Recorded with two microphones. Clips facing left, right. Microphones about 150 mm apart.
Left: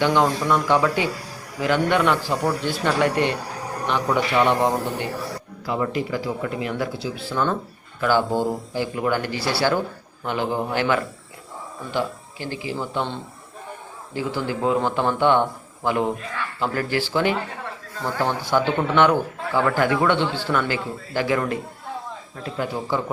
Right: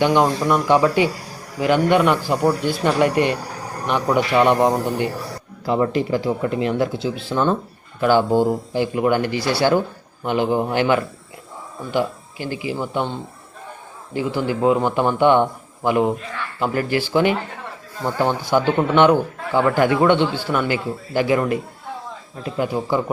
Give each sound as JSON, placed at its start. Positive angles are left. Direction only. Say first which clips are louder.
{"t": 0.0, "sound": "a man's voice", "louder": "right 3 dB", "side_deg": -15}
{"t": 5.6, "sound": "a man's voice", "louder": "right 5 dB", "side_deg": -30}